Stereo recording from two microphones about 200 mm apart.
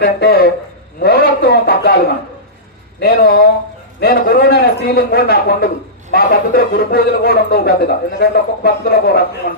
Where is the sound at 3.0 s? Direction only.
50° left (ahead or behind).